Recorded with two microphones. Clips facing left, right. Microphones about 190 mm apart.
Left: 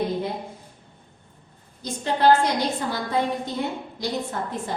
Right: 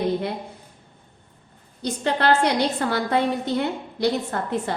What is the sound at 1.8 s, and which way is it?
A woman's voice, 70° right (ahead or behind).